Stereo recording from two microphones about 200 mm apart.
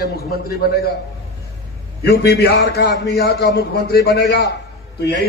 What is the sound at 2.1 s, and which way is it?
A man's voice, 50° left (ahead or behind).